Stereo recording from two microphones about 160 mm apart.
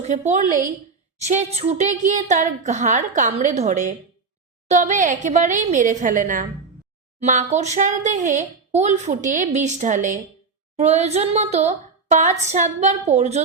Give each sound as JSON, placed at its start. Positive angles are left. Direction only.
{"t": 0.0, "sound": "speech", "side_deg": -45}